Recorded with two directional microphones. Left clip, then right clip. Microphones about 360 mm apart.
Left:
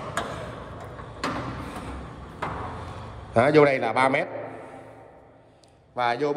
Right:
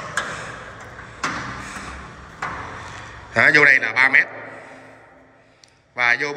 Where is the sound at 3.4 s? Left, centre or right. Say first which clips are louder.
Right 6 dB; centre.